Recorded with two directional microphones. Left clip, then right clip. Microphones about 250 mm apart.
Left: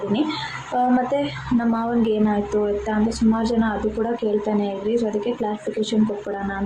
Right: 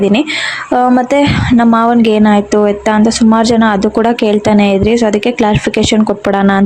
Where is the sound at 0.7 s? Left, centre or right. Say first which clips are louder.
Right 10 dB; right.